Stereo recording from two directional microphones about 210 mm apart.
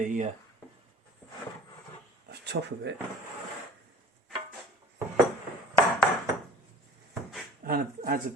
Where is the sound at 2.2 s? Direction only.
55° right (ahead or behind).